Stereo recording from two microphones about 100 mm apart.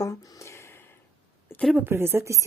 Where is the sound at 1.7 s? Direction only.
25° right (ahead or behind).